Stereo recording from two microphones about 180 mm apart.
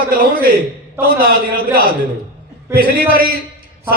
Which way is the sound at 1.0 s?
55° right (ahead or behind).